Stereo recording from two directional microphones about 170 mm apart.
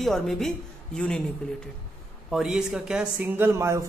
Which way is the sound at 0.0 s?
Centre (ahead or behind).